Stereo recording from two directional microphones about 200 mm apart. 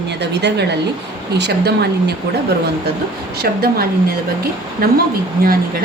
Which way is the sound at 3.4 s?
50° right (ahead or behind).